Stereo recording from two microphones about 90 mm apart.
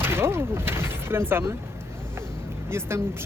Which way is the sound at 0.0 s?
25° right (ahead or behind).